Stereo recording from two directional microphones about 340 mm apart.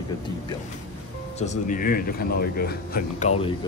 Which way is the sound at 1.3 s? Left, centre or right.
Left.